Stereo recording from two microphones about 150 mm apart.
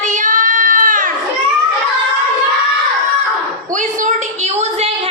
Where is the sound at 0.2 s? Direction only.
60° right (ahead or behind).